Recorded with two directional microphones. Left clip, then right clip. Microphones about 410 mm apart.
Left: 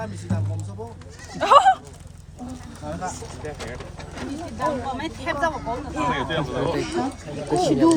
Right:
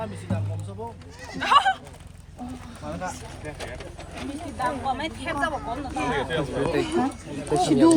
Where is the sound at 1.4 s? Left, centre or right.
Centre.